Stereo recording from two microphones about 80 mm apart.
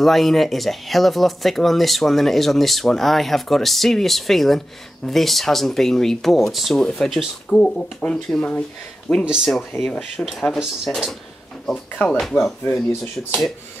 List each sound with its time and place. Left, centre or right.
0.0 s speech: centre
9.2 s speech: centre
9.8 s speech: centre
11.7 s speech: centre
12.2 s speech: centre